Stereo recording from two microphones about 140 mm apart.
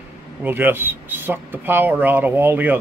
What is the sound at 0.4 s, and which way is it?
Speech, 15° right (ahead or behind).